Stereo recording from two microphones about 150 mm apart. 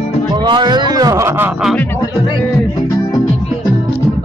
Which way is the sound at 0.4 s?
30° right (ahead or behind).